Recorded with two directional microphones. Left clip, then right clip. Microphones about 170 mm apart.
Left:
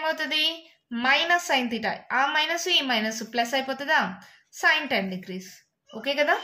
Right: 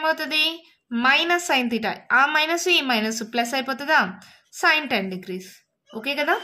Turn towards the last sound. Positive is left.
turn(degrees=-35)  # may be behind; listen again after turning